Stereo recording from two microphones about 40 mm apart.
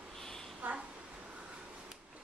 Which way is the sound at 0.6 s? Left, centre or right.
Right.